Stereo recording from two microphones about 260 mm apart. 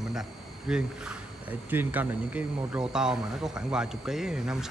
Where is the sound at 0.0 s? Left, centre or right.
Centre.